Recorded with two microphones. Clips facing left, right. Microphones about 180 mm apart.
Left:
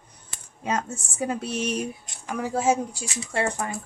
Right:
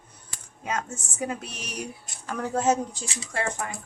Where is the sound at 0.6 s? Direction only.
30° left (ahead or behind).